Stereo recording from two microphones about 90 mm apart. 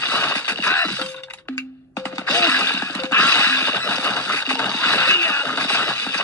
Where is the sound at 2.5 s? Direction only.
20° left (ahead or behind).